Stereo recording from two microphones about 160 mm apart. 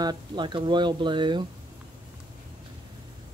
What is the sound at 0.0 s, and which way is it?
Speech, 25° right (ahead or behind).